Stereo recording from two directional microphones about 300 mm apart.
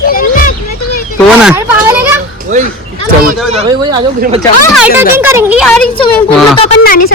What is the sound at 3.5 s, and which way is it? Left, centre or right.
Speech, centre.